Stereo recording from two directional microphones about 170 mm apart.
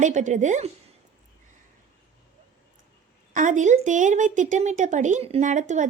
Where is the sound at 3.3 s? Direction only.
45° right (ahead or behind).